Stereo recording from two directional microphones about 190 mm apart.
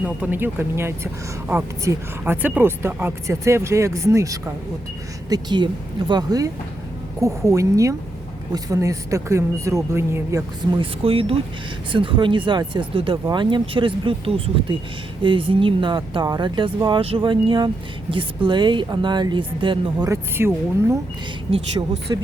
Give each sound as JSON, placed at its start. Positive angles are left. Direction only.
{"t": 0.0, "sound": "speech", "side_deg": -10}
{"t": 10.8, "sound": "speech", "side_deg": -30}
{"t": 20.3, "sound": "speech", "side_deg": -15}
{"t": 22.1, "sound": "speech", "side_deg": -20}